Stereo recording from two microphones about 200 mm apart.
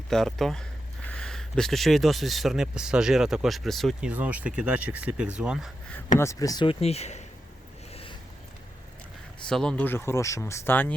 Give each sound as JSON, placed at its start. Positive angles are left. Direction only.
{"t": 0.1, "sound": "speech", "side_deg": 0}
{"t": 6.1, "sound": "speech", "side_deg": 15}
{"t": 9.5, "sound": "speech", "side_deg": 5}